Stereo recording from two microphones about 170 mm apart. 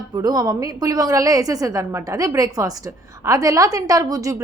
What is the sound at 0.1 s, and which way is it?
A woman's voice, 20° right (ahead or behind).